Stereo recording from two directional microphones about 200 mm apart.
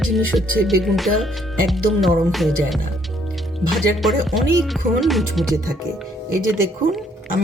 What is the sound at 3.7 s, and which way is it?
Music, centre (ahead or behind).